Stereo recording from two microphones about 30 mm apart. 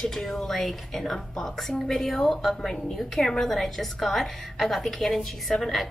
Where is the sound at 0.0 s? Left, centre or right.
Centre.